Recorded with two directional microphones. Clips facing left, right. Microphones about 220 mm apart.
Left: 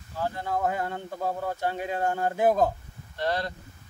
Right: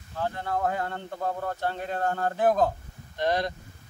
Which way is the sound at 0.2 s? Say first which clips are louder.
Even; 10° left (ahead or behind).